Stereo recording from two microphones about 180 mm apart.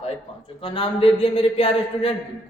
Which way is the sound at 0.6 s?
30° left (ahead or behind).